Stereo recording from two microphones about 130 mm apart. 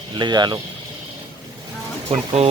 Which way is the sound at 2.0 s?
50° right (ahead or behind).